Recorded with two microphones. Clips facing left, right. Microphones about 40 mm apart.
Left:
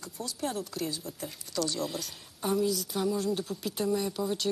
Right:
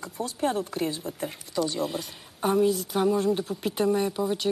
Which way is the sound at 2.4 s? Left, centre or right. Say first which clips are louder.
Right 6 dB; right.